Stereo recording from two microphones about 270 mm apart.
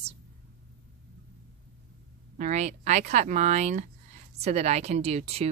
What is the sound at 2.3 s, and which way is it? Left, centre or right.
Speech, right.